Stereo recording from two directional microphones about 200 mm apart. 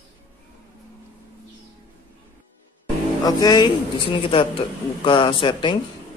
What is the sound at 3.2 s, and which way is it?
Speech, 20° left (ahead or behind).